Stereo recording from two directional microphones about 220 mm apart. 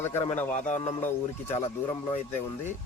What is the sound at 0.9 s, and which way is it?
Speech, 10° left (ahead or behind).